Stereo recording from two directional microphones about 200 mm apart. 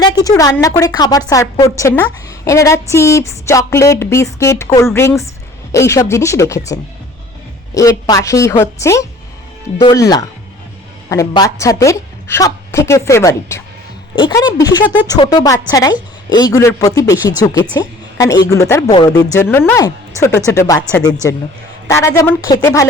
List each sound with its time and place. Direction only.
0.0 s a woman's voice: 20° left (ahead or behind)
7.7 s a woman's voice: 15° left (ahead or behind)
21.8 s a woman's voice: 15° left (ahead or behind)